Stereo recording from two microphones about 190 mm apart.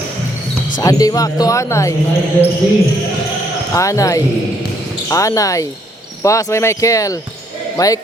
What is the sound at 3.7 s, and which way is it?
Speech, 15° left (ahead or behind).